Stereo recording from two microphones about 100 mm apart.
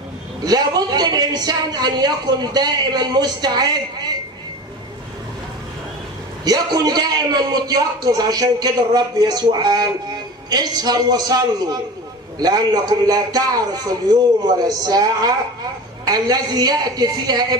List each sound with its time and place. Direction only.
0.4 s speech: 40° right (ahead or behind)
6.4 s a man's voice: 40° right (ahead or behind)